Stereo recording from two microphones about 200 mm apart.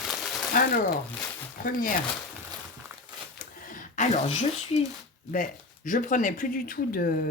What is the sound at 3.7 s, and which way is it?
Speech, 40° left (ahead or behind).